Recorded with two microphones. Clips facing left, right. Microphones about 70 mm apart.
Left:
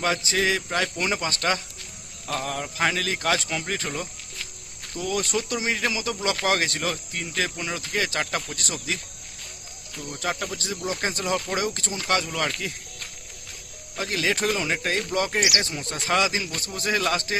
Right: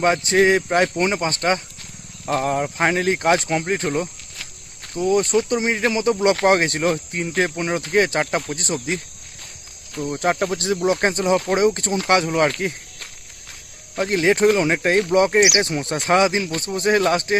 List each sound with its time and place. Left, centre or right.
0.0 s speech: right
5.2 s speech: right
6.0 s speech: right
8.2 s speech: right
9.9 s speech: right
11.2 s speech: right